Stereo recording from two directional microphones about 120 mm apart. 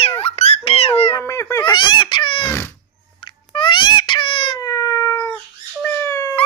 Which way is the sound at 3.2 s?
45° left (ahead or behind).